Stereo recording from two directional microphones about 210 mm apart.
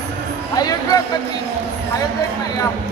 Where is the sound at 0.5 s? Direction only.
15° left (ahead or behind).